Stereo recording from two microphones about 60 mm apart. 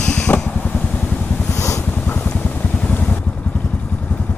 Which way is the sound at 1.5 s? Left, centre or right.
Left.